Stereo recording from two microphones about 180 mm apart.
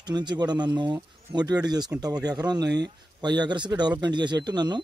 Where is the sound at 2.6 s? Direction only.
70° right (ahead or behind).